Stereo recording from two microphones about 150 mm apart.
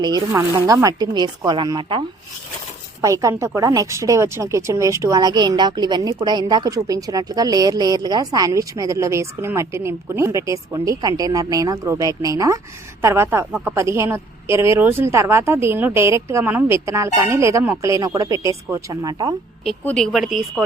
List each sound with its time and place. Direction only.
0.0 s a woman's voice: 25° right (ahead or behind)
3.0 s a woman's voice: 20° right (ahead or behind)
19.6 s speech: 5° left (ahead or behind)